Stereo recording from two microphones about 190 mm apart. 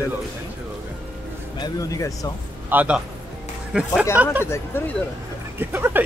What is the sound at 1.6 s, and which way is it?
Speech, 20° left (ahead or behind).